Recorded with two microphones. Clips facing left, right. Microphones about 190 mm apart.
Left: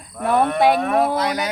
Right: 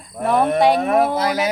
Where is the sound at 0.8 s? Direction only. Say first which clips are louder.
Right 2 dB; 25° right (ahead or behind).